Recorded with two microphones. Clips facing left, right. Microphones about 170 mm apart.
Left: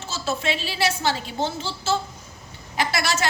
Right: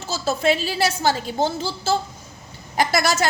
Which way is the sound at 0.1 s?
40° right (ahead or behind).